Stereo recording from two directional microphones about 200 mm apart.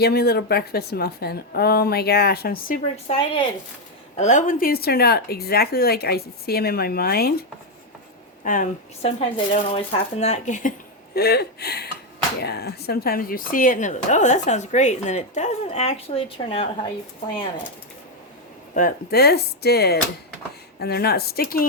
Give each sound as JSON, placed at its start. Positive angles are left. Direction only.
{"t": 0.0, "sound": "a woman's voice", "side_deg": 50}
{"t": 4.2, "sound": "a woman's voice", "side_deg": 40}
{"t": 8.4, "sound": "speech", "side_deg": 40}
{"t": 18.7, "sound": "a woman's voice", "side_deg": 45}